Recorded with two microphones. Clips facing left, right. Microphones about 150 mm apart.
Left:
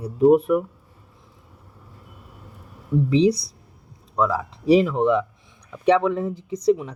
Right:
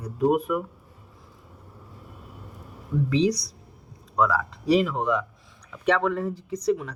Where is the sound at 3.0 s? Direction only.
25° left (ahead or behind).